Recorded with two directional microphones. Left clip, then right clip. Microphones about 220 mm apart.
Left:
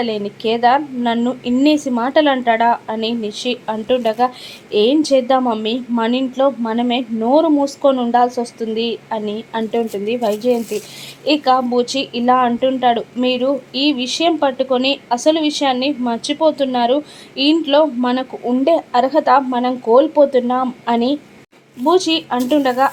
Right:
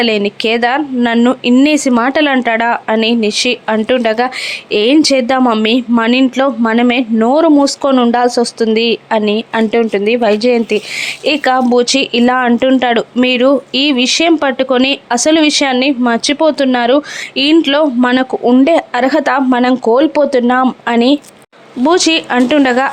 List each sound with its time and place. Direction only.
0.0 s speech: 25° right (ahead or behind)